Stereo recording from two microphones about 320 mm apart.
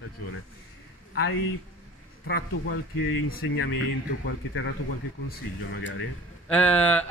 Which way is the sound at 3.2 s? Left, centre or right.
Left.